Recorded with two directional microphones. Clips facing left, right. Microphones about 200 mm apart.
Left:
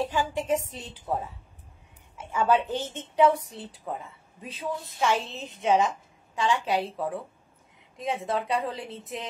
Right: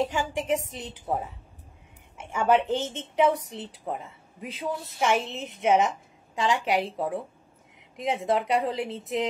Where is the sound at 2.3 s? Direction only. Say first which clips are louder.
Right 2 dB; 20° right (ahead or behind).